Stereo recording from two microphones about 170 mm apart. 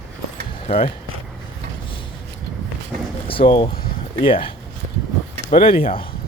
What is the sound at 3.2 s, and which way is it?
Speech, 30° left (ahead or behind).